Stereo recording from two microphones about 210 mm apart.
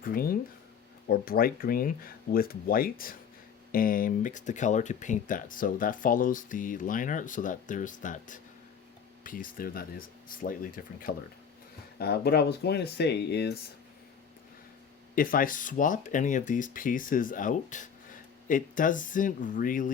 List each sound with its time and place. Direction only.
0.0 s speech: 45° left (ahead or behind)
15.1 s speech: 40° left (ahead or behind)